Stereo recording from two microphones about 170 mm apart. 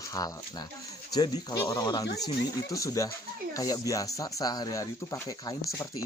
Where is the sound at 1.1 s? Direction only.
25° left (ahead or behind).